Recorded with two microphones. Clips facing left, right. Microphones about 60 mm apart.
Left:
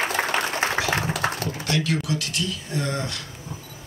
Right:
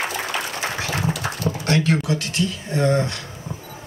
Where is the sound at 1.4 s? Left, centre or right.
Right.